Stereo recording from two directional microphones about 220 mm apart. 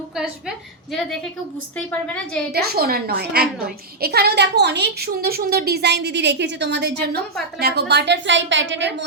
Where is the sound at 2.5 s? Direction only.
45° right (ahead or behind).